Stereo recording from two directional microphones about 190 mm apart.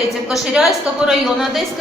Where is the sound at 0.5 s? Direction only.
5° right (ahead or behind).